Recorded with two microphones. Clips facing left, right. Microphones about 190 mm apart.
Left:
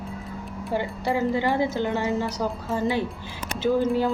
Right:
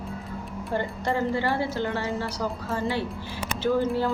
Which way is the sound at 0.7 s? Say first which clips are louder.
Left 2 dB; 10° left (ahead or behind).